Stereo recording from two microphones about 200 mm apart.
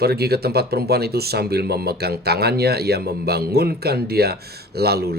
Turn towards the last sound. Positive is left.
turn(degrees=-50)  # may be behind; listen again after turning